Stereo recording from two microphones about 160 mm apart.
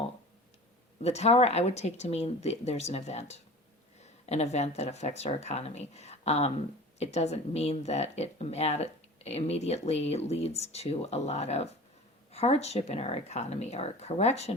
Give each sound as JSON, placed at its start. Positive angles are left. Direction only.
{"t": 1.0, "sound": "speech", "side_deg": 40}